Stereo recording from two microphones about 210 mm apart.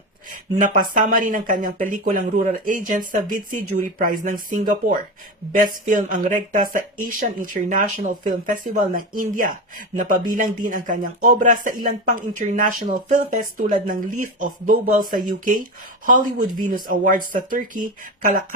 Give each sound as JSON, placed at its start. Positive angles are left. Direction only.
{"t": 0.3, "sound": "speech", "side_deg": -40}